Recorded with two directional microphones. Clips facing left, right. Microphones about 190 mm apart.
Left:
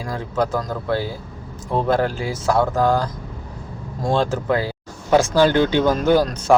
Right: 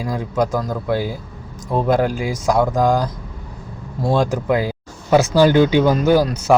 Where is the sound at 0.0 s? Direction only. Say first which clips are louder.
Right 2 dB; 15° right (ahead or behind).